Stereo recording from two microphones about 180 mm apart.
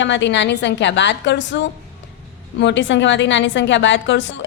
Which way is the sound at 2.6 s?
90° left.